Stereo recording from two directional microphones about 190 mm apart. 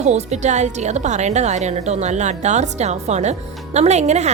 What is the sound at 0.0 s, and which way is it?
A woman's voice, 35° right (ahead or behind).